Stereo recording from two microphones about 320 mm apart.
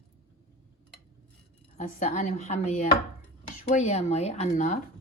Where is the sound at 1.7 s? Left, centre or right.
Left.